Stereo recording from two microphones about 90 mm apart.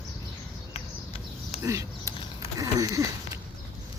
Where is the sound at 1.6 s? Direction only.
35° right (ahead or behind).